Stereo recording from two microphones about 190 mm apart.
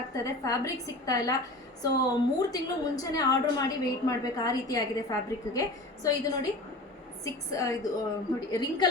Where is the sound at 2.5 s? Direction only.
20° left (ahead or behind).